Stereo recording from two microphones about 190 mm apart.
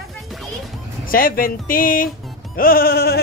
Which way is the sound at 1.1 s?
50° left (ahead or behind).